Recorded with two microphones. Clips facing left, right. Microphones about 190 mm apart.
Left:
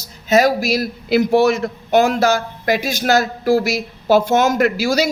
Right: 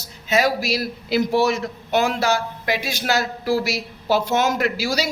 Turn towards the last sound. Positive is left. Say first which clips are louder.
# left 6 dB
turn(degrees=45)  # may be behind; listen again after turning